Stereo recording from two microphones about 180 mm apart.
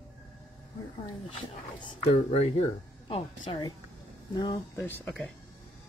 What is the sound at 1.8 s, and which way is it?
A woman's voice, 30° left (ahead or behind).